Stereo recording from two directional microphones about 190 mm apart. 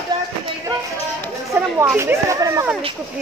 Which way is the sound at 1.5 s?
10° right (ahead or behind).